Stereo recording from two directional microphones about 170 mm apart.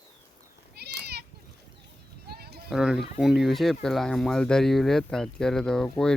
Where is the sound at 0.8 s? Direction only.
70° right (ahead or behind).